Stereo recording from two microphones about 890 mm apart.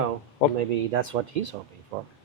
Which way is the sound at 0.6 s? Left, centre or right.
Right.